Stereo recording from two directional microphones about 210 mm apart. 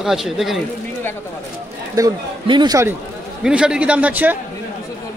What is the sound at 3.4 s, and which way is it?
Speech, 5° right (ahead or behind).